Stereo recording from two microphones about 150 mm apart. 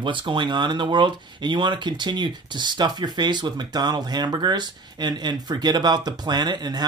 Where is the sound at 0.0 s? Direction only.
35° right (ahead or behind).